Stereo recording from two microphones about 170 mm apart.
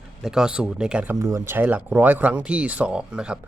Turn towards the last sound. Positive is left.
turn(degrees=-5)  # may be behind; listen again after turning